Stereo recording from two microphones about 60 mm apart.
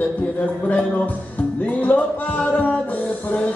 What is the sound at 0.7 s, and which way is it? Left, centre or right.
Speech, centre.